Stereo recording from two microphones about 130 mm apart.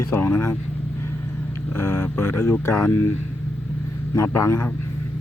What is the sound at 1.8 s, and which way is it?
Speech, 15° left (ahead or behind).